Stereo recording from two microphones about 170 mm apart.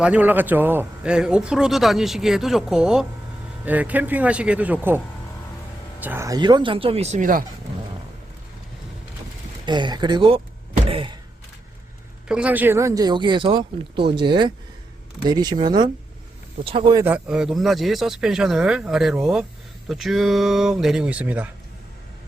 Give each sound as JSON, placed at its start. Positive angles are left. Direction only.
{"t": 0.0, "sound": "a man's voice", "side_deg": -10}
{"t": 9.6, "sound": "speech", "side_deg": -25}
{"t": 10.8, "sound": "a sound", "side_deg": -30}
{"t": 12.3, "sound": "speech", "side_deg": -10}
{"t": 17.0, "sound": "a man's voice", "side_deg": -5}